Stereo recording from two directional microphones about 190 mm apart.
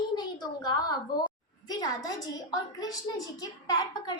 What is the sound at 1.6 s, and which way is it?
A woman's voice, 20° left (ahead or behind).